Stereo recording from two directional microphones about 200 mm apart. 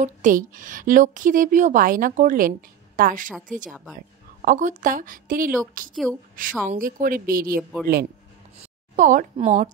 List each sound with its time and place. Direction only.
0.0 s a woman's voice: 40° right (ahead or behind)
8.9 s a woman's voice: 40° right (ahead or behind)